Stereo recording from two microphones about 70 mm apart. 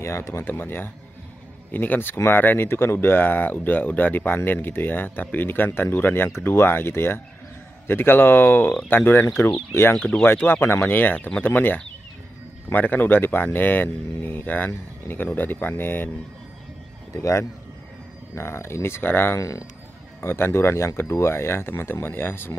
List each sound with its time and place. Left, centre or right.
0.0 s speech: left
9.9 s speech: centre
10.2 s speech: left
17.1 s speech: left
19.3 s speech: left
20.2 s speech: left